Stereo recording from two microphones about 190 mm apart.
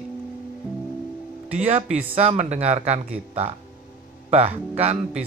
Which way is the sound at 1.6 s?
35° right (ahead or behind).